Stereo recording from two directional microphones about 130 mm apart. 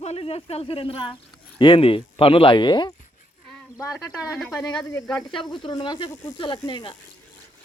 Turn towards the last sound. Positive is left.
turn(degrees=40)  # may be behind; listen again after turning